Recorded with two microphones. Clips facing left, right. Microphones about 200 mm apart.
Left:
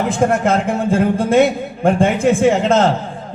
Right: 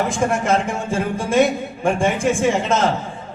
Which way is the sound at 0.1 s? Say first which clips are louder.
Left 4 dB; 60° left (ahead or behind).